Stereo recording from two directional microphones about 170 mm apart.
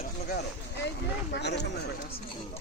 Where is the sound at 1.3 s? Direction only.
85° left.